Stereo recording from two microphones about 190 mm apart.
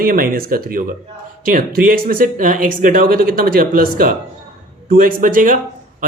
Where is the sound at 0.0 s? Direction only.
50° right (ahead or behind).